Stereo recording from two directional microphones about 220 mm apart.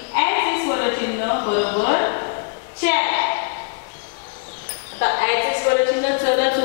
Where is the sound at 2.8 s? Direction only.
15° left (ahead or behind).